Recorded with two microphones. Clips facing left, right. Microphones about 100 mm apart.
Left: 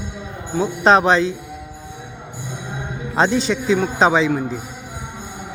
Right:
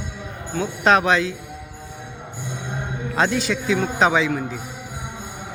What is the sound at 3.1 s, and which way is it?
Speech, 25° left (ahead or behind).